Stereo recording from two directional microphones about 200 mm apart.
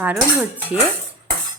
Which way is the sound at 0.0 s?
5° right (ahead or behind).